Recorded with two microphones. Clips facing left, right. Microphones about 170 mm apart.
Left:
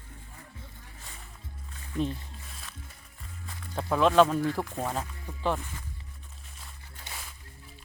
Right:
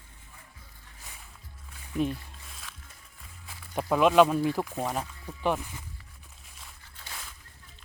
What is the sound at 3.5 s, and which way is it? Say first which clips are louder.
Speech: right 2 dB; 15° right (ahead or behind).